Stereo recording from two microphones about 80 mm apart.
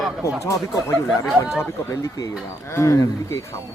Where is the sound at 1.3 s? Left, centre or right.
Centre.